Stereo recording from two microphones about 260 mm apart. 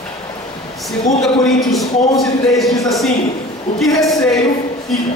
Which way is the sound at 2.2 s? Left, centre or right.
Centre.